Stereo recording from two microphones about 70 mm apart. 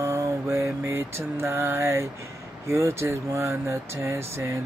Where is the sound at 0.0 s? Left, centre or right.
Right.